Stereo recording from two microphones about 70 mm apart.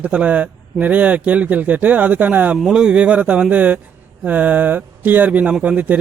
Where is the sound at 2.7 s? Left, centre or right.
Centre.